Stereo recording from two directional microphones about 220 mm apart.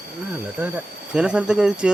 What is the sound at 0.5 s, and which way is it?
Speech, 5° right (ahead or behind).